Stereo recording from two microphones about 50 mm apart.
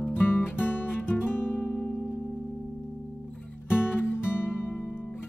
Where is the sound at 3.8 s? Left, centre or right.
Left.